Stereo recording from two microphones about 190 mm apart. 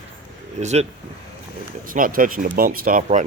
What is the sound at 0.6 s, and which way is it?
Speech, 35° right (ahead or behind).